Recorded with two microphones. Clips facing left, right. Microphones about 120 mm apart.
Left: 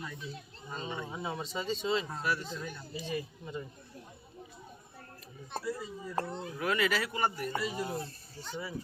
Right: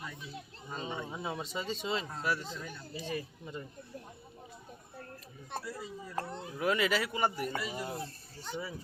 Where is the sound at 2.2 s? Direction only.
20° right (ahead or behind).